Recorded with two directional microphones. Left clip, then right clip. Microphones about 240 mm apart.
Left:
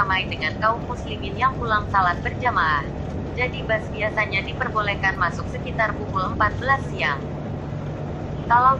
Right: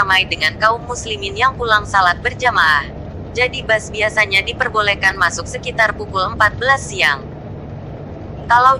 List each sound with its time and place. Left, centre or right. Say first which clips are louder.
0.0 s a woman's voice: right 8 dB; right
8.4 s a woman's voice: right 6 dB; right